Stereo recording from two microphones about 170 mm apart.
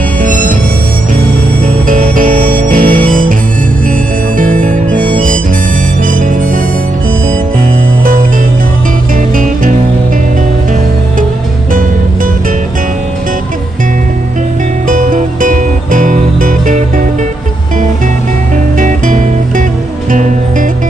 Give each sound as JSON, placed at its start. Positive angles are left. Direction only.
{"t": 0.2, "sound": "music", "side_deg": -50}
{"t": 1.9, "sound": "music", "side_deg": -50}
{"t": 4.4, "sound": "harmonica", "side_deg": -50}
{"t": 14.9, "sound": "music", "side_deg": -50}
{"t": 18.8, "sound": "music", "side_deg": -50}